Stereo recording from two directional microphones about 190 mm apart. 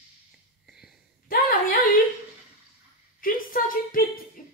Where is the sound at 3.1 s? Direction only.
50° left (ahead or behind).